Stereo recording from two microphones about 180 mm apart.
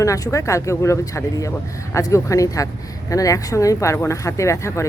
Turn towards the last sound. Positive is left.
turn(degrees=15)  # may be behind; listen again after turning